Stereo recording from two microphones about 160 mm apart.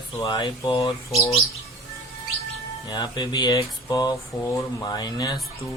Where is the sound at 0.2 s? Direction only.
30° left (ahead or behind).